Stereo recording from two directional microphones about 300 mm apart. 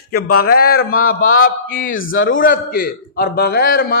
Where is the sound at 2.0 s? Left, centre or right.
Left.